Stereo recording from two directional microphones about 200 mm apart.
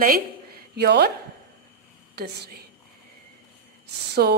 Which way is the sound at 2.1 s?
55° right (ahead or behind).